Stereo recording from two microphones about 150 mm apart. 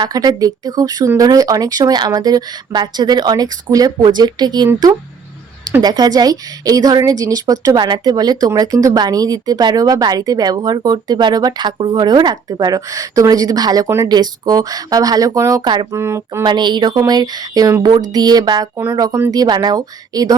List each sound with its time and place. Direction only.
0.0 s a woman's voice: 25° right (ahead or behind)
16.0 s a sound: 15° right (ahead or behind)
16.4 s a woman's voice: 30° right (ahead or behind)